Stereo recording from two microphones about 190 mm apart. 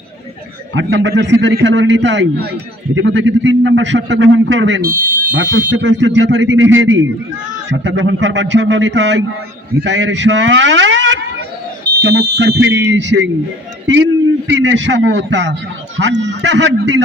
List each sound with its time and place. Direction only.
0.7 s a man's voice: 75° right (ahead or behind)
4.8 s speech: 50° right (ahead or behind)
5.7 s a man's voice: 70° right (ahead or behind); by 7.0 s 90° right
7.7 s a man's voice: 70° right (ahead or behind)
11.9 s a man's voice: 60° right (ahead or behind)